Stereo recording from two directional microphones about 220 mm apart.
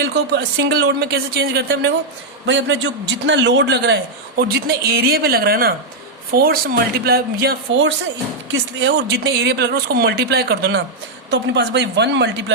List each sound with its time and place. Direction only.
0.0 s a man's voice: 50° right (ahead or behind)